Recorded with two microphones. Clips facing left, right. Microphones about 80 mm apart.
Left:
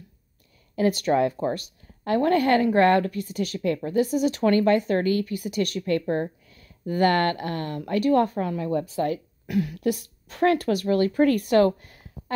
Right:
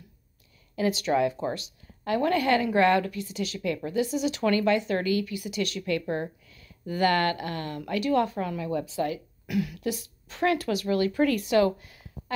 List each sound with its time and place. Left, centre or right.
0.7 s a woman's voice: left
9.8 s speech: left